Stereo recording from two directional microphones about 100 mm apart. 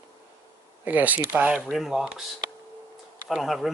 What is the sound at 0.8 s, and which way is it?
Speech, 15° right (ahead or behind).